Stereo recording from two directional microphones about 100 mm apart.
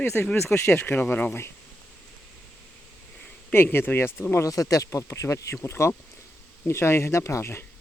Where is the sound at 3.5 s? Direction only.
20° left (ahead or behind).